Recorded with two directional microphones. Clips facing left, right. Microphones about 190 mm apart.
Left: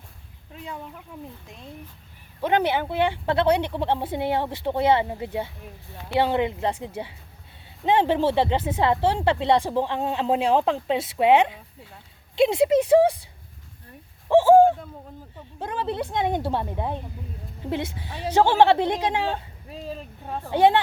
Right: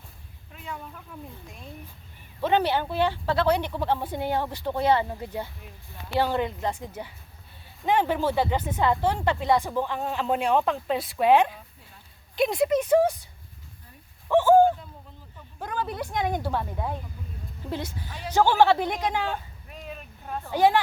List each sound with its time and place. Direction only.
0.5 s a sound: 30° left (ahead or behind)
2.4 s speech: 15° left (ahead or behind)
14.3 s bird: 30° left (ahead or behind)
15.4 s a woman's voice: 25° left (ahead or behind)